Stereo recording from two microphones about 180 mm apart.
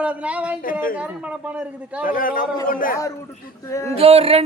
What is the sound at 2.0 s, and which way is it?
Speech, 50° left (ahead or behind).